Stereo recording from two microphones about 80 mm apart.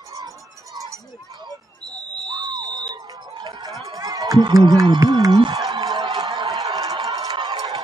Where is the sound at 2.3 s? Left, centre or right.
Right.